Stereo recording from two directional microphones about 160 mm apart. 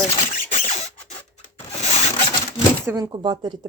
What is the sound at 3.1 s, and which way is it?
Speech, 30° right (ahead or behind).